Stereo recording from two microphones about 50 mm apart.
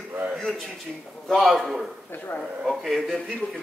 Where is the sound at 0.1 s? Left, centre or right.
Right.